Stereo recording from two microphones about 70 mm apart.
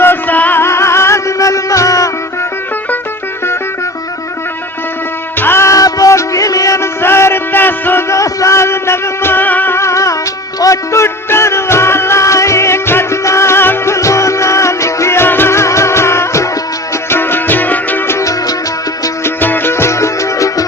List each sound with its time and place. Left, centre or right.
0.0 s music: left
0.6 s music: left
5.4 s music: left
5.6 s music: left
7.0 s music: left
8.1 s music: left
9.7 s music: left
18.2 s music: left
19.2 s music: left